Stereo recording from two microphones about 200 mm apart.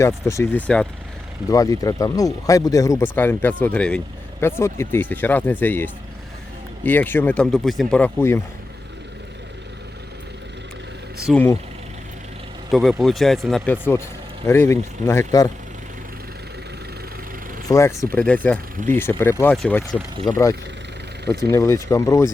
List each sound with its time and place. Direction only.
0.0 s speech: 15° left (ahead or behind)
11.3 s speech: centre (ahead or behind)
12.7 s speech: centre (ahead or behind); by 15.4 s 15° left (ahead or behind)
17.7 s speech: 15° left (ahead or behind)
20.3 s speech: 20° left (ahead or behind)
21.5 s speech: 15° left (ahead or behind)